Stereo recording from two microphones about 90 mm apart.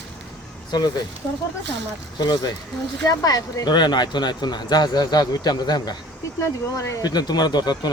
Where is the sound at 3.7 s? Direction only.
55° left (ahead or behind).